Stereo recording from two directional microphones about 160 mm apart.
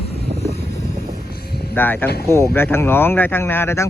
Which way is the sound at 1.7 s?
10° left (ahead or behind).